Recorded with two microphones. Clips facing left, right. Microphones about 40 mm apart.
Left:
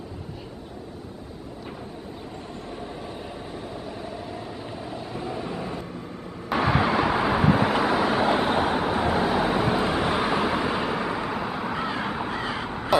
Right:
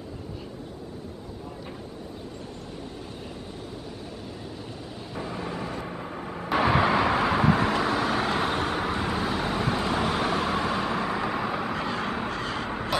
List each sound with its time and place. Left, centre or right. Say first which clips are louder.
5.1 s vehicle: even; centre
5.8 s vehicle: right 1 dB; right
6.5 s vehicle: even; centre